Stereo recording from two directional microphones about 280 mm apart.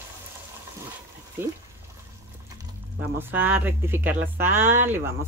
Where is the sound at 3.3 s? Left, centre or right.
Centre.